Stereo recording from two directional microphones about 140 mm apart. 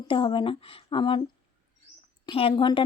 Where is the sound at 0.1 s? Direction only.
35° left (ahead or behind).